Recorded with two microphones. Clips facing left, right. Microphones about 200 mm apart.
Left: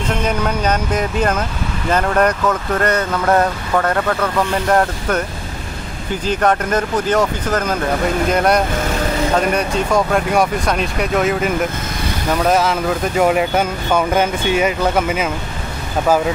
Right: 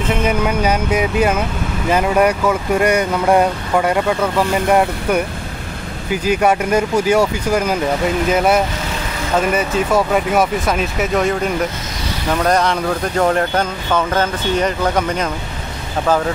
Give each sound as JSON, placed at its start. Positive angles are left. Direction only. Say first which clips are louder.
{"t": 0.1, "sound": "speech", "louder": "right 2 dB", "side_deg": -5}